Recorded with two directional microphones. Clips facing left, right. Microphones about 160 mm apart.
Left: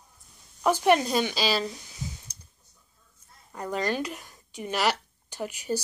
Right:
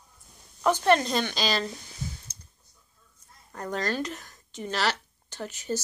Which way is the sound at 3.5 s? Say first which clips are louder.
Left 1 dB; 10° left (ahead or behind).